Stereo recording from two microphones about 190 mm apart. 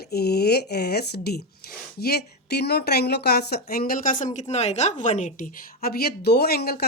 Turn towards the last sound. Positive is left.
turn(degrees=55)  # may be behind; listen again after turning